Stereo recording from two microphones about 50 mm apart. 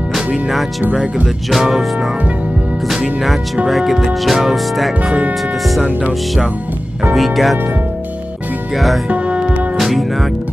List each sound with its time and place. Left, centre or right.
1.5 s speech: centre
2.9 s speech: centre
7.2 s speech: centre
8.7 s speech: centre
9.1 s music: right
9.8 s music: centre